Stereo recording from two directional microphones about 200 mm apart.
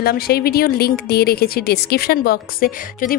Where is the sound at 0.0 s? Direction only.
50° left (ahead or behind).